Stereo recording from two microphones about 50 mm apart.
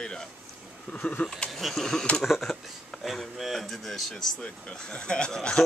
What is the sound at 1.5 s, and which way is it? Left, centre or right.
Speech, centre.